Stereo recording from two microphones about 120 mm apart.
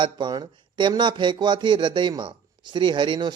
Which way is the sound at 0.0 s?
40° right (ahead or behind).